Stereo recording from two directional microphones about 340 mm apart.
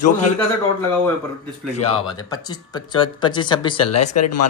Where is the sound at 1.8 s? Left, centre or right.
Centre.